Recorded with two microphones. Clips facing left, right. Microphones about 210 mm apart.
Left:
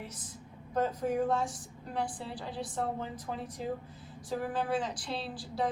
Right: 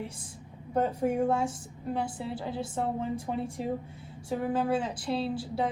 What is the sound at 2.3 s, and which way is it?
A woman's voice, 25° right (ahead or behind).